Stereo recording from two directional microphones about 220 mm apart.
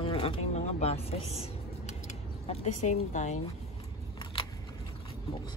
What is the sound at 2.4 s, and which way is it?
Speech, 30° left (ahead or behind).